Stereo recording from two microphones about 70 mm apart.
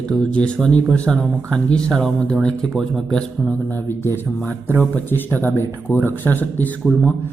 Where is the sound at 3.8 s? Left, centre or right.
Left.